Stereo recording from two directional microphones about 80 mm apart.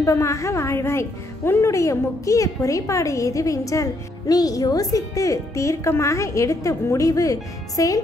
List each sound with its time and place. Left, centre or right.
0.0 s a woman's voice: left